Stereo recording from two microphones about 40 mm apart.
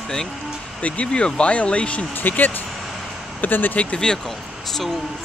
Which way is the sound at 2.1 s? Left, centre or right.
Left.